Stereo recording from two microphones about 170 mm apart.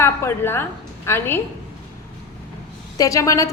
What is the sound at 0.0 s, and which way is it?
A woman's voice, 15° left (ahead or behind).